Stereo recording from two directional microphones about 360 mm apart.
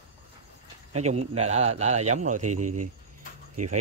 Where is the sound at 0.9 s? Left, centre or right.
Centre.